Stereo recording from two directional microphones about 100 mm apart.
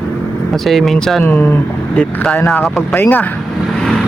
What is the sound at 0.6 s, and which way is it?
Speech, centre (ahead or behind).